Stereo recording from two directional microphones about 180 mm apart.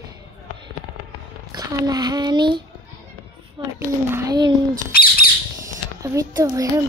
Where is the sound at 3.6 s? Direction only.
25° right (ahead or behind).